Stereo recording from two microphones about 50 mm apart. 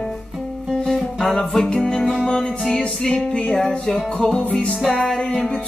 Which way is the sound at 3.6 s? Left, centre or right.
Centre.